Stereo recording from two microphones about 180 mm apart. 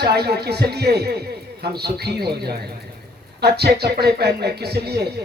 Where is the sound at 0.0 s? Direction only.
65° right (ahead or behind).